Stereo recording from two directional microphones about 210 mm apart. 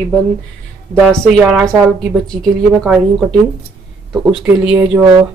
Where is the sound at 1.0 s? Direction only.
5° right (ahead or behind).